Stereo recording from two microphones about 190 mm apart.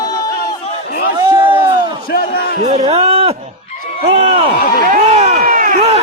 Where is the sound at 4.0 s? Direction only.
30° right (ahead or behind).